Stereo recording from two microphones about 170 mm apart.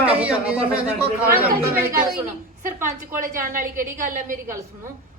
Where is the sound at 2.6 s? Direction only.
15° right (ahead or behind).